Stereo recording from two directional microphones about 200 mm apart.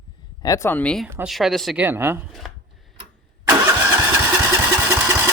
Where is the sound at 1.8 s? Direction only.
10° right (ahead or behind).